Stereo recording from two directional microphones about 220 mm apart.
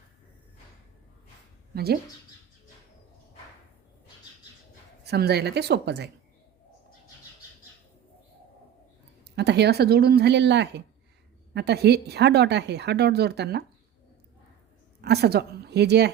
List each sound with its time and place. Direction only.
1.7 s speech: 45° right (ahead or behind)
5.0 s speech: 50° right (ahead or behind)
9.2 s speech: 50° right (ahead or behind)
15.0 s speech: 45° right (ahead or behind)